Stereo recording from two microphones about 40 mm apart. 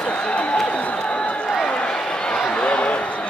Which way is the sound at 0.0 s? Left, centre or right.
Left.